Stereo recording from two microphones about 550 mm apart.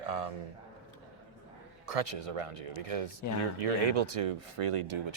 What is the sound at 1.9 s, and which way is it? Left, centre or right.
Speech, right.